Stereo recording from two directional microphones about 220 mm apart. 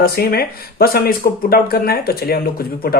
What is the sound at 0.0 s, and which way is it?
Speech, 45° left (ahead or behind).